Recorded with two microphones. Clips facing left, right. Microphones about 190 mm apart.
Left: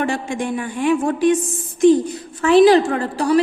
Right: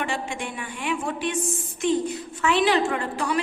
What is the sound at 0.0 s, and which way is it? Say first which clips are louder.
A woman's voice: left 7 dB; 40° left (ahead or behind).